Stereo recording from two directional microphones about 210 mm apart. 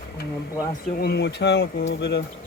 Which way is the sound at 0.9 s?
50° left (ahead or behind).